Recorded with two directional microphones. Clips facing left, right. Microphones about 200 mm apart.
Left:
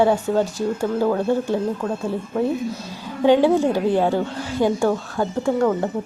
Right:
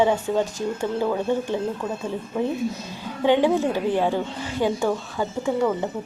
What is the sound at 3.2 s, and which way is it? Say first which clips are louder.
A woman's voice: left 4 dB; 10° left (ahead or behind).